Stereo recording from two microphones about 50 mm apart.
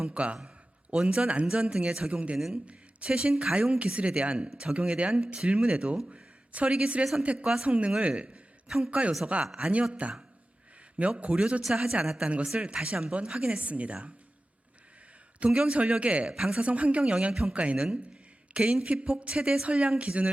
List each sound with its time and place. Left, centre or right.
0.0 s speech: right
7.4 s speech: centre
7.7 s speech: right
8.6 s speech: centre
8.9 s speech: right
9.9 s speech: right
11.2 s speech: centre
15.4 s speech: centre
16.2 s speech: centre
16.6 s speech: right